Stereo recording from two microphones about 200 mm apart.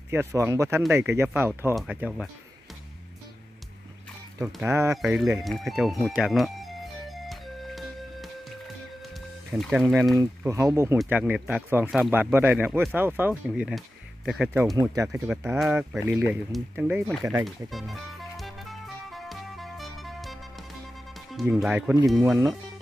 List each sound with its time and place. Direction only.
0.1 s speech: 15° right (ahead or behind)
4.6 s speech: 15° right (ahead or behind)
4.9 s speech: centre (ahead or behind)
5.4 s music: centre (ahead or behind)
9.5 s speech: centre (ahead or behind)
10.1 s speech: 15° right (ahead or behind)
14.8 s speech: 20° right (ahead or behind)
15.0 s speech: 5° right (ahead or behind)
17.6 s music: centre (ahead or behind)
21.3 s speech: centre (ahead or behind)
22.2 s speech: 15° right (ahead or behind)